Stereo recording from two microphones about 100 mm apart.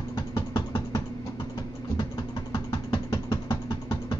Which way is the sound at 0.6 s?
50° left (ahead or behind).